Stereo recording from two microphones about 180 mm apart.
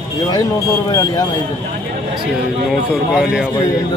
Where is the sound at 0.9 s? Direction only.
20° left (ahead or behind).